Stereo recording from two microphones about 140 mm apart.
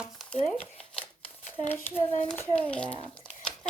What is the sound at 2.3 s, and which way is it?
Speech, 10° left (ahead or behind).